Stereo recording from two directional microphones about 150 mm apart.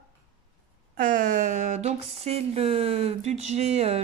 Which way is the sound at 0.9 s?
65° right (ahead or behind).